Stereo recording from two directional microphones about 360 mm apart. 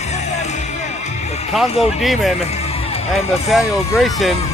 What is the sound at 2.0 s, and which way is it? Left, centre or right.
Speech, centre.